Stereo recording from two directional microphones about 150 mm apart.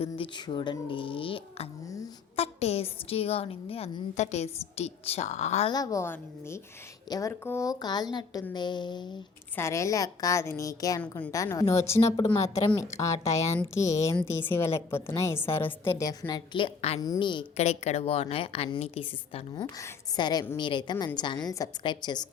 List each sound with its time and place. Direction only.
0.0 s a woman's voice: 30° left (ahead or behind)
5.7 s a woman's voice: 25° left (ahead or behind)
9.6 s a woman's voice: 20° left (ahead or behind)
11.0 s a woman's voice: 10° left (ahead or behind)
11.3 s a woman's voice: 20° left (ahead or behind); by 17.0 s 40° left (ahead or behind)
17.0 s a woman's voice: 30° left (ahead or behind)
17.6 s a woman's voice: 45° left (ahead or behind); by 22.3 s 30° left (ahead or behind)